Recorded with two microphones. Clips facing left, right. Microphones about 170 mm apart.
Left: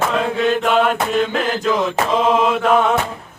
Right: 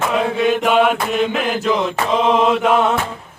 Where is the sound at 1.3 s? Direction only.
10° right (ahead or behind).